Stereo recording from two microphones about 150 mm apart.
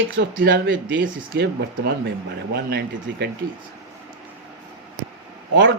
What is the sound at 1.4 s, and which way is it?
A man's voice, 90° right.